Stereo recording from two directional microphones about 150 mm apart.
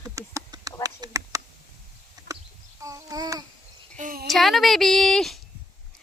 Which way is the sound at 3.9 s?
65° right (ahead or behind).